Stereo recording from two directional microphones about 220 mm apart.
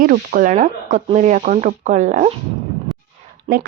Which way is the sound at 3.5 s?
30° right (ahead or behind).